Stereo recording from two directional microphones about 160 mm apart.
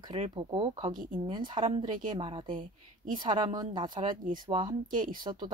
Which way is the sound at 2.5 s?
60° right (ahead or behind).